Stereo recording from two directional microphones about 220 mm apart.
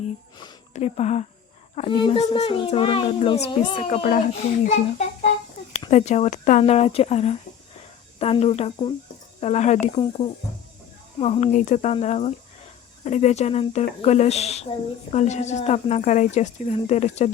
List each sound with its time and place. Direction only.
0.3 s a child's voice: 25° left (ahead or behind)